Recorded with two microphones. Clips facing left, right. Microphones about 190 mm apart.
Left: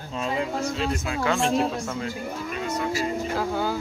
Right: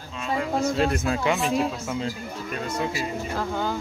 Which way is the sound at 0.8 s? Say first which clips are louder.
Right 4 dB; 50° right (ahead or behind).